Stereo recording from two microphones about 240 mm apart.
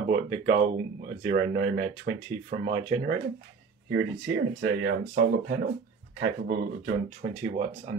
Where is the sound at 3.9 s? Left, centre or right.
Right.